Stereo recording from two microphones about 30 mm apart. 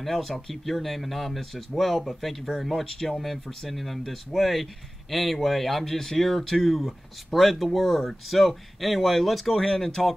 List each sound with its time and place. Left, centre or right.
0.0 s speech: centre
9.6 s speech: centre